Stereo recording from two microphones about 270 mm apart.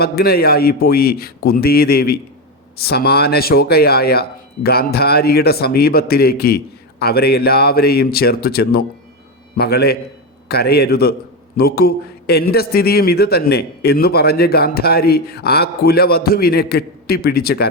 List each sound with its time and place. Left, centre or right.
0.0 s a man's voice: left